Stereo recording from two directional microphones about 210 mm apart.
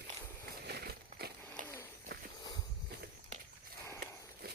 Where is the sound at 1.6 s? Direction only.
10° left (ahead or behind).